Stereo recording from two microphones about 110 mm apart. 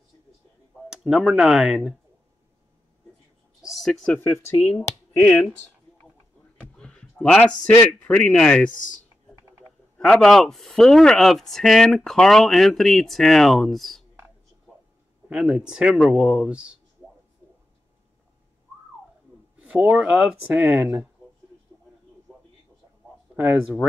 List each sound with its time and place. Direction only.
0.8 s speech: 5° right (ahead or behind)
3.6 s speech: centre (ahead or behind)
4.1 s speech: 20° left (ahead or behind)
6.8 s a man's voice: 10° left (ahead or behind)
9.9 s speech: 5° left (ahead or behind)
15.2 s speech: 5° right (ahead or behind)
19.6 s speech: 10° right (ahead or behind)